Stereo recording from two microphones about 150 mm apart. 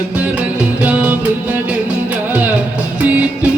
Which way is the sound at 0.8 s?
10° right (ahead or behind).